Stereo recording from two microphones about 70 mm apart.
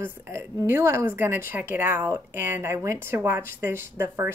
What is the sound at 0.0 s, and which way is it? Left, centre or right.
Speech, right.